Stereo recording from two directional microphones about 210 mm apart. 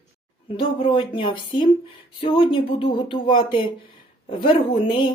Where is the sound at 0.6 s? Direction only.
25° left (ahead or behind).